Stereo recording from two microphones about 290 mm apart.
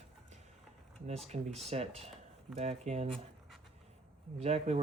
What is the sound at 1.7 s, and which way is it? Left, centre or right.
Speech, right.